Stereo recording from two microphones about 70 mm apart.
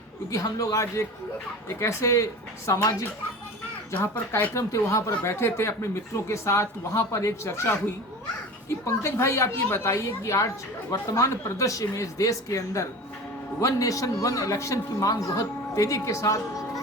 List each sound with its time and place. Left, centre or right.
0.3 s a man's voice: left
4.0 s speech: left
4.5 s a man's voice: left
8.9 s a man's voice: left